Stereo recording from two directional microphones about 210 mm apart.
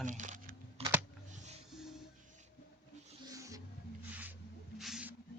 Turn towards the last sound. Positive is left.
turn(degrees=-5)  # may be behind; listen again after turning